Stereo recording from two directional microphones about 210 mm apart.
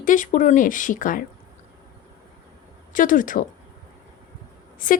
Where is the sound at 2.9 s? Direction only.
40° left (ahead or behind).